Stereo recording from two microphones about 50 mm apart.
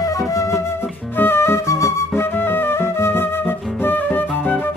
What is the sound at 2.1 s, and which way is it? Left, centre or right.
Flute, left.